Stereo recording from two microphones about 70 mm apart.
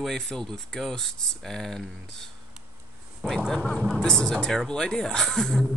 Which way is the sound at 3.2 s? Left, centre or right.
Centre.